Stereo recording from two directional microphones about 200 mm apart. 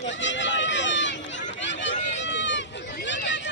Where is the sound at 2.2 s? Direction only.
65° left (ahead or behind).